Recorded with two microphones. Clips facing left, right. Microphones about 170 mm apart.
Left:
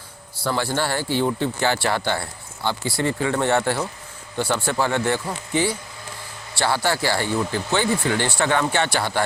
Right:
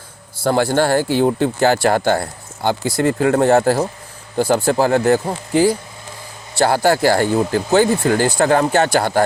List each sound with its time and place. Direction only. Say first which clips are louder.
0.4 s speech: right 8 dB; 45° right (ahead or behind)